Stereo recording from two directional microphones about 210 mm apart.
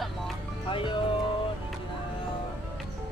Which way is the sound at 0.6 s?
25° left (ahead or behind).